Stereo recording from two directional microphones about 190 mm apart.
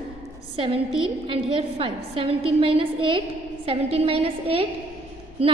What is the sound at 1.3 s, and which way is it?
A woman's voice, 30° right (ahead or behind).